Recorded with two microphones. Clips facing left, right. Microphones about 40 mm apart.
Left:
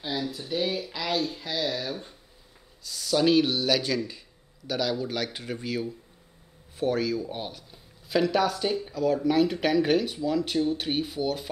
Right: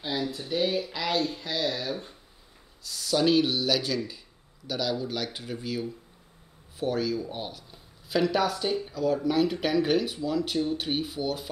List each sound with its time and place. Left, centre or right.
0.0 s speech: centre